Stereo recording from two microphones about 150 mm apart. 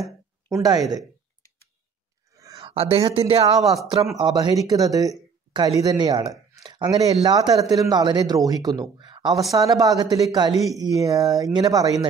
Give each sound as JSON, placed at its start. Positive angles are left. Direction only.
{"t": 0.0, "sound": "a sound", "side_deg": -25}
{"t": 2.6, "sound": "speech", "side_deg": -40}
{"t": 4.2, "sound": "speech", "side_deg": -25}